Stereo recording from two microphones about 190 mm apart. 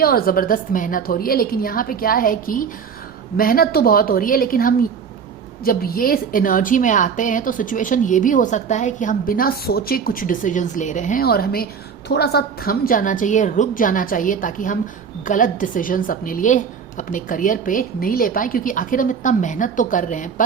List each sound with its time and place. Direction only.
0.0 s a woman's voice: 50° left (ahead or behind)